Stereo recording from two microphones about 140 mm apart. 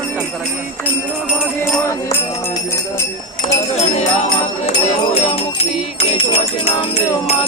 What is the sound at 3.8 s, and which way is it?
Jingle bell, 55° left (ahead or behind).